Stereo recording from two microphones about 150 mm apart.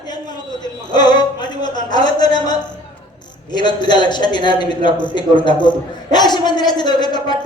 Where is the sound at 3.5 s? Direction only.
30° left (ahead or behind).